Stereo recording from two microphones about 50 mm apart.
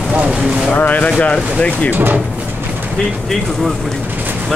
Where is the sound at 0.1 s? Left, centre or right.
Right.